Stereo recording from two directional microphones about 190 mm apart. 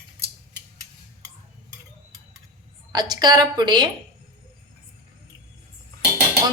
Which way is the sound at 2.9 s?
20° right (ahead or behind).